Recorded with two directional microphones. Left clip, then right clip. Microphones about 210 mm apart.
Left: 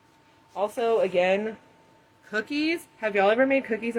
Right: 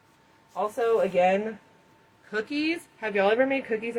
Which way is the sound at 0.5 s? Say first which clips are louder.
Even; 45° left (ahead or behind).